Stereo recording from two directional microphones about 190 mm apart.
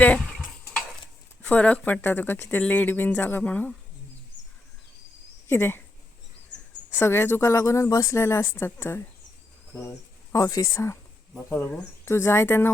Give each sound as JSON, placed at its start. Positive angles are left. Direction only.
{"t": 0.0, "sound": "a sound", "side_deg": 5}
{"t": 1.4, "sound": "speech", "side_deg": 5}
{"t": 5.5, "sound": "speech", "side_deg": 10}
{"t": 7.0, "sound": "speech", "side_deg": 10}
{"t": 10.3, "sound": "speech", "side_deg": 20}